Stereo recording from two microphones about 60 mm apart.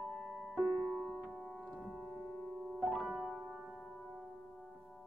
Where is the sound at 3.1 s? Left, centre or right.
Centre.